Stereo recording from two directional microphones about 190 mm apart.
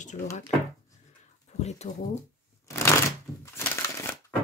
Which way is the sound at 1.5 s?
35° left (ahead or behind).